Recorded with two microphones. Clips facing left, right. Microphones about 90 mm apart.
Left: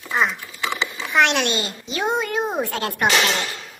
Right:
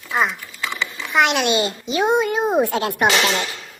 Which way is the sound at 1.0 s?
5° right (ahead or behind).